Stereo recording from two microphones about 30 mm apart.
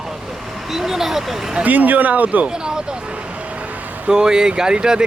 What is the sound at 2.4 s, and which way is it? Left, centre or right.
Speech, right.